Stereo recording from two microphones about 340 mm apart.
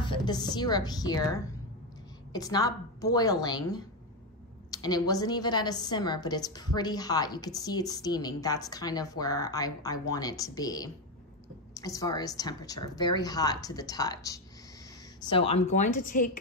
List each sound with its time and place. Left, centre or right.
0.0 s a woman's voice: centre
2.3 s a woman's voice: centre